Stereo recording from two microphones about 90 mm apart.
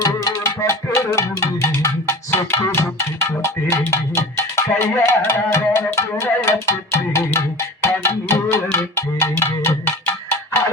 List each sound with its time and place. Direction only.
0.0 s music: 40° left (ahead or behind)
8.0 s cowbell: 30° left (ahead or behind)